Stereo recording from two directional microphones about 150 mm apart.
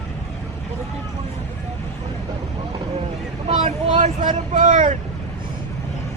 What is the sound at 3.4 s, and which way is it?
Speech, 50° right (ahead or behind).